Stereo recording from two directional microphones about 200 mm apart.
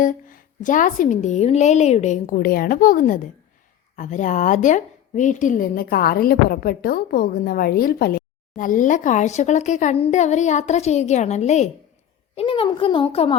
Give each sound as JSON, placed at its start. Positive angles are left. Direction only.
{"t": 0.0, "sound": "a woman's voice", "side_deg": 40}